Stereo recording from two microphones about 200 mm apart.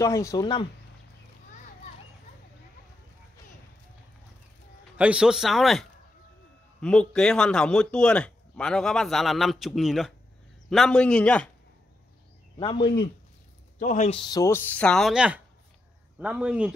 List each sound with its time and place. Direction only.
0.0 s speech: 15° left (ahead or behind)
4.9 s a man's voice: 5° right (ahead or behind)
12.5 s speech: 25° left (ahead or behind)
13.7 s speech: 40° left (ahead or behind)
14.1 s a man's voice: 20° left (ahead or behind); by 16.7 s 5° right (ahead or behind)